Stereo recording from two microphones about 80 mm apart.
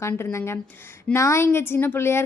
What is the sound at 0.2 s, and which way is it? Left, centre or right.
A woman's voice, left.